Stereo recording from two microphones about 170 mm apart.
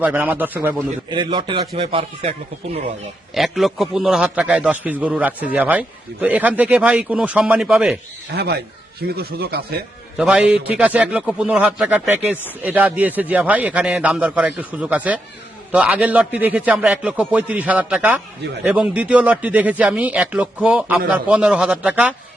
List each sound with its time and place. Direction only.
0.0 s a man's voice: 10° right (ahead or behind)
1.1 s speech: 25° right (ahead or behind)
3.3 s a man's voice: centre (ahead or behind)
8.4 s speech: 70° right (ahead or behind)
10.2 s a man's voice: 5° right (ahead or behind)